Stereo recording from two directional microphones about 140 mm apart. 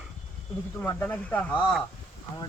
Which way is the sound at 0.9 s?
10° left (ahead or behind).